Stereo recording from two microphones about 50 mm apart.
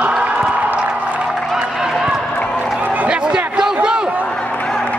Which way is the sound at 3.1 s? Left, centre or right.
Centre.